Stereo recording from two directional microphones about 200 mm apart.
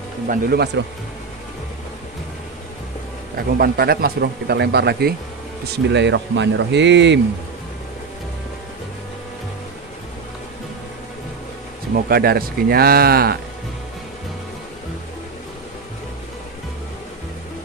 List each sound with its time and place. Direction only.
0.3 s speech: 55° right (ahead or behind)
3.5 s speech: 50° right (ahead or behind)
11.9 s speech: 50° right (ahead or behind)